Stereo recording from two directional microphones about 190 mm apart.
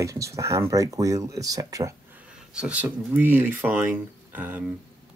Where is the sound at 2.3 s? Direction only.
5° right (ahead or behind).